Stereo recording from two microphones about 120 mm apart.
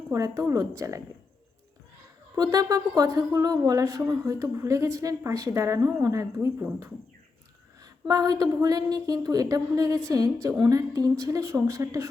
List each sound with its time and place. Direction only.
0.1 s a woman's voice: 25° right (ahead or behind)
2.3 s a woman's voice: 30° right (ahead or behind)
7.8 s a woman's voice: 30° right (ahead or behind)